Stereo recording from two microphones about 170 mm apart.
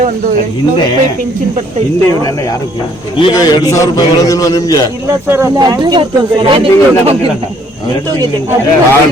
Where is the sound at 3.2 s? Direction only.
25° left (ahead or behind).